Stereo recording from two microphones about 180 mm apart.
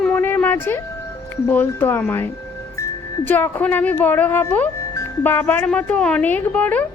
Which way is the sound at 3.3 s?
10° left (ahead or behind).